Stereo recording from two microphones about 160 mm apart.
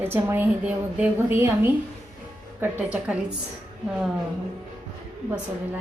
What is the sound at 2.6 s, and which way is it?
Speech, 10° right (ahead or behind).